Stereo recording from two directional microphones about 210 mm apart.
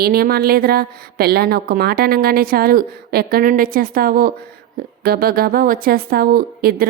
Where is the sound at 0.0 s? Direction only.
45° right (ahead or behind).